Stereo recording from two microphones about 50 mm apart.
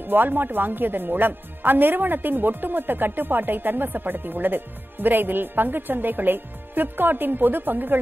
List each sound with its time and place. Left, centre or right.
0.0 s speech: right